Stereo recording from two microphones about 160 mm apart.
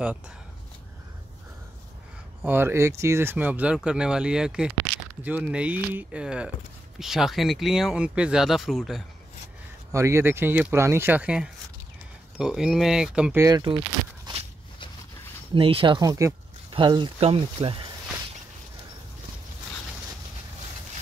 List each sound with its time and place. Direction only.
2.4 s speech: 15° right (ahead or behind)
9.9 s speech: 20° right (ahead or behind)
13.4 s speech: 25° right (ahead or behind)
15.5 s speech: 35° right (ahead or behind)